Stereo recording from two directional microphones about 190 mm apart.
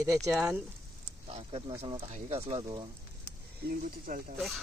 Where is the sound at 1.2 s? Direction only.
30° right (ahead or behind).